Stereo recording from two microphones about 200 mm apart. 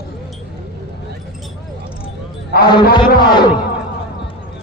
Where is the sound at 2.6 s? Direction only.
20° left (ahead or behind).